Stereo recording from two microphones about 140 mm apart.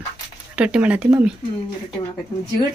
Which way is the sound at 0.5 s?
10° right (ahead or behind).